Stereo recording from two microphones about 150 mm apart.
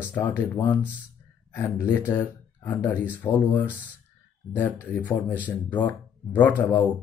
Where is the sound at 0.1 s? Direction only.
15° left (ahead or behind).